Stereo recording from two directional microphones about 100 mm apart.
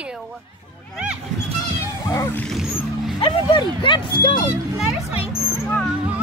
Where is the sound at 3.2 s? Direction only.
55° left (ahead or behind).